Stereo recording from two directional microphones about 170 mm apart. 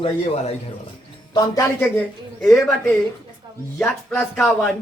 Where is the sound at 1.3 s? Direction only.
20° left (ahead or behind).